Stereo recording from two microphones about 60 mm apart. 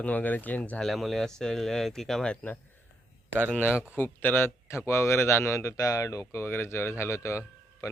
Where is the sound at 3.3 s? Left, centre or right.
Right.